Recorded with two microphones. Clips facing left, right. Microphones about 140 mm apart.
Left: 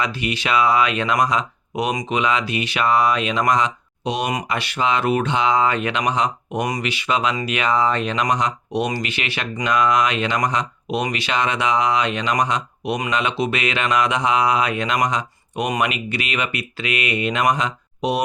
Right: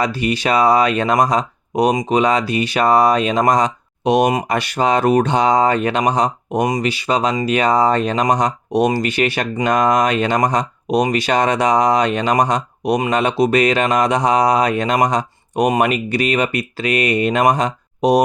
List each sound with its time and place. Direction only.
0.0 s speech: 40° right (ahead or behind)